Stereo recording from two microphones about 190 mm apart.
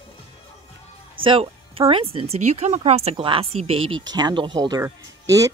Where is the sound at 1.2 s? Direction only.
30° right (ahead or behind).